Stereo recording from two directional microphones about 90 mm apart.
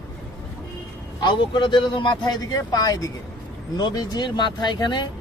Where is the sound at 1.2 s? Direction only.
60° left (ahead or behind).